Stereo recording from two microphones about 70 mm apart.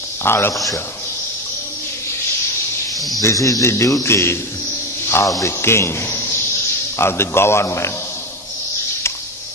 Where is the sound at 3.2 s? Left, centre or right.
Left.